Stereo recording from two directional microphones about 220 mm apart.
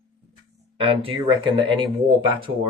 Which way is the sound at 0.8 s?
25° right (ahead or behind).